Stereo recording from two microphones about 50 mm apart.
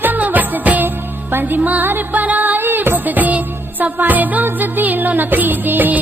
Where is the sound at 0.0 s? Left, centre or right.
Right.